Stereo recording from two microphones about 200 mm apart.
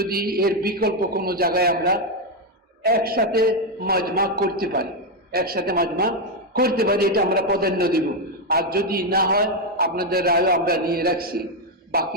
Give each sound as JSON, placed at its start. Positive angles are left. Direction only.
{"t": 0.1, "sound": "a man's voice", "side_deg": -50}